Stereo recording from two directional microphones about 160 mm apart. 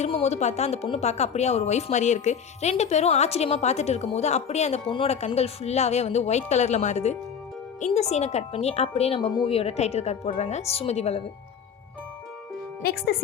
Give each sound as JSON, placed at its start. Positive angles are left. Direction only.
{"t": 0.0, "sound": "speech", "side_deg": 40}
{"t": 12.8, "sound": "speech", "side_deg": 75}